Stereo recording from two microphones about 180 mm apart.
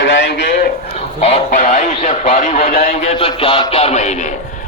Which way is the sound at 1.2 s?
35° left (ahead or behind).